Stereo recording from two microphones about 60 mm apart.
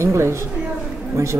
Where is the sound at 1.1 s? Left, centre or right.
Right.